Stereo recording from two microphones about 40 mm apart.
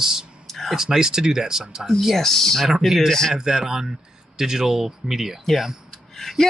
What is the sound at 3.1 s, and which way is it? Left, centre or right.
Speech, centre.